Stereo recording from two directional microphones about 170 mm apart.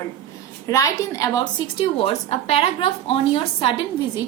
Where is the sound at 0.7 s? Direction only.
20° left (ahead or behind).